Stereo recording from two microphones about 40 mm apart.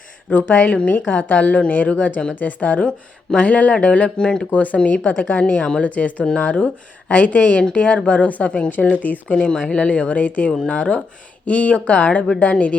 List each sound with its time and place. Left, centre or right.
0.3 s a woman's voice: left
4.2 s speech: left
4.5 s a woman's voice: left